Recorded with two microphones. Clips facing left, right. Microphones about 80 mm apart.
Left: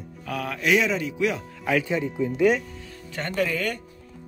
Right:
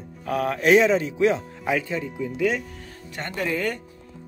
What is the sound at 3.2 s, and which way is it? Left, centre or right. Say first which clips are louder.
Speech: left 1 dB; right.